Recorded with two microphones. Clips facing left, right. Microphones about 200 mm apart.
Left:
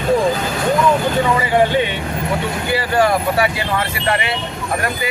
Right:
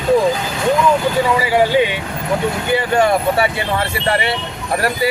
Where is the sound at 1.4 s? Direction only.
10° right (ahead or behind).